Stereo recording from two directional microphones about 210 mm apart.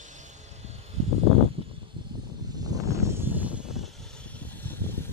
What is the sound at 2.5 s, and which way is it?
Vehicle, 20° right (ahead or behind).